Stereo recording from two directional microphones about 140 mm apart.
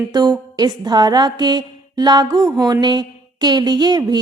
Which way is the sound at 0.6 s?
30° right (ahead or behind).